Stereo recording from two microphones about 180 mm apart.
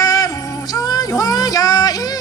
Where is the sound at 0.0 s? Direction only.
20° left (ahead or behind).